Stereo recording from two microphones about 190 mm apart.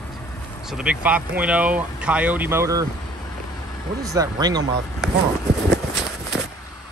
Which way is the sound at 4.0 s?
20° right (ahead or behind).